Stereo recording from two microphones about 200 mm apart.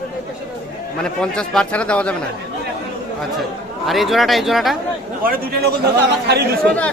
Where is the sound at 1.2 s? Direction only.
5° left (ahead or behind).